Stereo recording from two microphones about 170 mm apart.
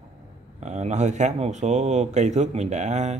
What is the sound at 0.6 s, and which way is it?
A man's voice, 40° right (ahead or behind).